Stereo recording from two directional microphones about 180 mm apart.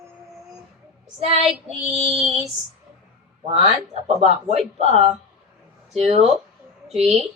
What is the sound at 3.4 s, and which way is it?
Speech, 35° right (ahead or behind).